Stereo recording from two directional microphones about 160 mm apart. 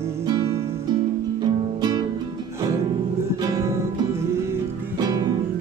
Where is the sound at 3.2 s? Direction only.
20° right (ahead or behind).